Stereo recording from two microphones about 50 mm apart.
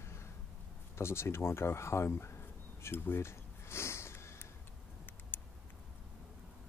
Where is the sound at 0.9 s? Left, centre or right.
Left.